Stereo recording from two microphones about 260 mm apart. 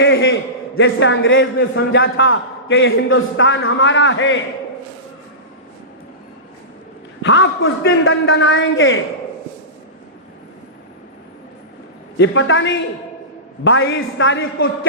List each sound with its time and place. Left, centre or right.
0.0 s a sound: left
0.8 s a man's voice: left
7.2 s a man's voice: left
12.1 s a man's voice: left